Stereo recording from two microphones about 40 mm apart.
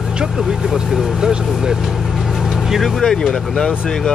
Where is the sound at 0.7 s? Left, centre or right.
Centre.